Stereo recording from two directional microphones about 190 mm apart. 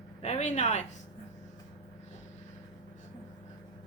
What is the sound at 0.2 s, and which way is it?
Speech, 35° left (ahead or behind).